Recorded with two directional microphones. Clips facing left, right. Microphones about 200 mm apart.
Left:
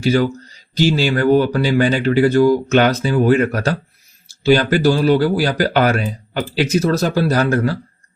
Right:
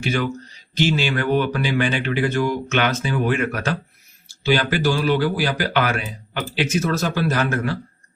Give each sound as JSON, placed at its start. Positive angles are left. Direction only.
{"t": 0.0, "sound": "speech", "side_deg": 35}